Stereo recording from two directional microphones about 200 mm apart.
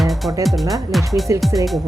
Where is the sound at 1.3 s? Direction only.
15° right (ahead or behind).